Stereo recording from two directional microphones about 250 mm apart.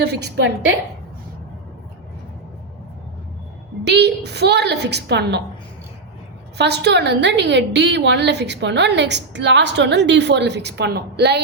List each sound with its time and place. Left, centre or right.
0.0 s a woman's voice: right
3.8 s a woman's voice: right
6.6 s a woman's voice: right